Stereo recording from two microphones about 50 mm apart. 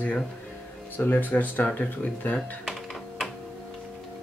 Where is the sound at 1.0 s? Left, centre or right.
Left.